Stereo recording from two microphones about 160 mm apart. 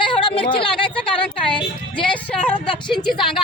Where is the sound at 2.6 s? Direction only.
30° left (ahead or behind).